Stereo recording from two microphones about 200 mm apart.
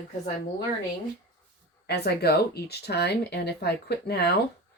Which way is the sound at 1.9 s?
55° left (ahead or behind).